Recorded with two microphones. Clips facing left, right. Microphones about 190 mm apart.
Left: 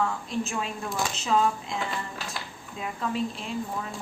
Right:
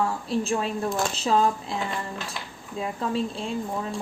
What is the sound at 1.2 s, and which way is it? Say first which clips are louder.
Speech: right 1 dB; 35° right (ahead or behind).